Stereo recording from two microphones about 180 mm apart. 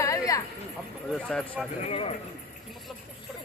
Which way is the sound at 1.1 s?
Centre (ahead or behind).